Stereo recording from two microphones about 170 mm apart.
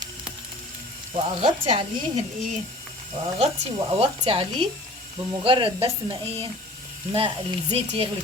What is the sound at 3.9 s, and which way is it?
Speech, 30° right (ahead or behind).